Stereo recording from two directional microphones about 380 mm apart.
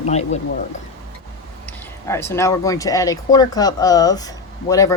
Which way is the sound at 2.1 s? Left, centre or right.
Centre.